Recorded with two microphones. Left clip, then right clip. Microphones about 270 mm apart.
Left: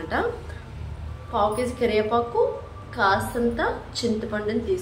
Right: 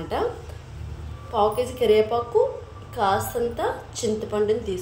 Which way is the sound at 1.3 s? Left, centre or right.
Right.